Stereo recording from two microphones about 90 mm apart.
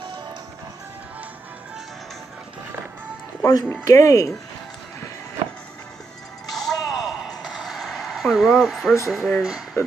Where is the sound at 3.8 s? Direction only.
40° left (ahead or behind).